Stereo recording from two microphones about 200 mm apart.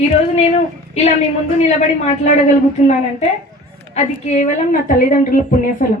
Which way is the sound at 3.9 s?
35° left (ahead or behind).